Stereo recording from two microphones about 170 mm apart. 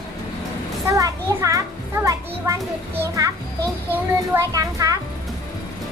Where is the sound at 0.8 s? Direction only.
20° right (ahead or behind).